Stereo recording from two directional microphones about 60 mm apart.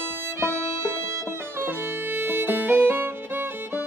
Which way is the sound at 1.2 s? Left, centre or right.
Right.